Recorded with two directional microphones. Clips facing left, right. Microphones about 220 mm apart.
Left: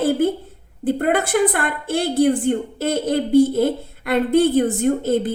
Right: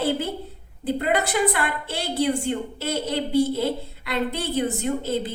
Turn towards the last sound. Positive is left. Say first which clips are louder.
# left 7 dB
turn(degrees=50)  # may be behind; listen again after turning